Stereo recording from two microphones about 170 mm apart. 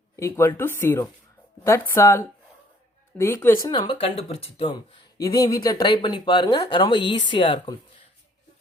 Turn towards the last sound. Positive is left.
turn(degrees=30)  # may be behind; listen again after turning